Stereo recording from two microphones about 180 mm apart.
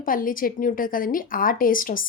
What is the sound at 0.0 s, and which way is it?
A woman's voice, 50° left (ahead or behind).